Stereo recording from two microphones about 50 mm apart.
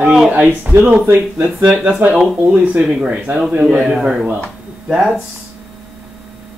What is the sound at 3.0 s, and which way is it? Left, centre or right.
Speech, centre.